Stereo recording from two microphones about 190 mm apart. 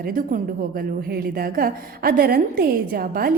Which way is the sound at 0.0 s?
45° right (ahead or behind).